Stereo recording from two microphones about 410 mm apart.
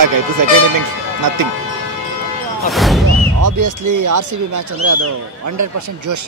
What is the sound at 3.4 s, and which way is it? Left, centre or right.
Speech, right.